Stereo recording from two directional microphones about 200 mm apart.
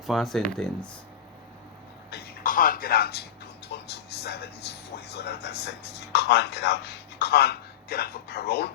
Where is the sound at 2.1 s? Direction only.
50° left (ahead or behind).